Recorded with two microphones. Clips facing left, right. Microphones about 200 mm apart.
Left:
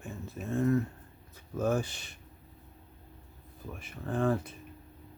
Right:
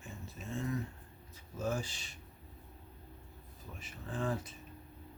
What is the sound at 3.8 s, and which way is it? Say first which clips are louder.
Speech: left 8 dB; 60° left (ahead or behind).